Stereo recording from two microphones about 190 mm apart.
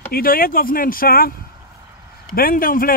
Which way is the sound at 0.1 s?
50° left (ahead or behind).